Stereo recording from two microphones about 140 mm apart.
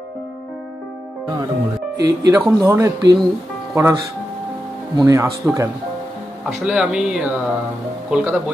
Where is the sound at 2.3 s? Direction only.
15° right (ahead or behind).